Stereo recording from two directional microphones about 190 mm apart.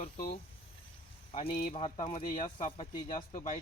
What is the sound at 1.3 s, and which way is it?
Speech, 35° left (ahead or behind).